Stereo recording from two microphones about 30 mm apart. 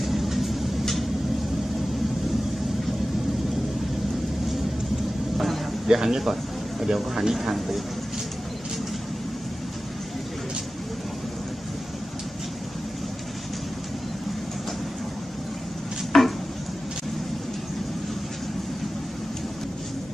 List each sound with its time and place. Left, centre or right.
0.0 s vehicle: centre
5.9 s speech: centre
16.1 s a sound: centre